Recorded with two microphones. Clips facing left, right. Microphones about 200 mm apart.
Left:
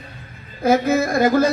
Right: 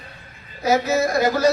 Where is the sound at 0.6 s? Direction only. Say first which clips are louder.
Left 2 dB; 55° left (ahead or behind).